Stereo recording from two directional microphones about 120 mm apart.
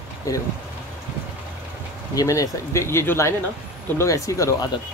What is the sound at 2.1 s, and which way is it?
Speech, 30° left (ahead or behind).